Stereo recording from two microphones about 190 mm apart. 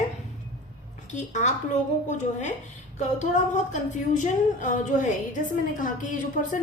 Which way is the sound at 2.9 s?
40° left (ahead or behind).